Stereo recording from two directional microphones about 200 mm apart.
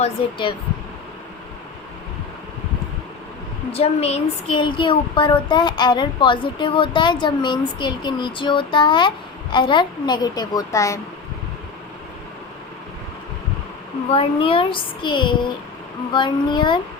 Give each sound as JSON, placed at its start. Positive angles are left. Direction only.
{"t": 0.0, "sound": "speech", "side_deg": 25}
{"t": 3.7, "sound": "speech", "side_deg": 30}
{"t": 14.1, "sound": "speech", "side_deg": 25}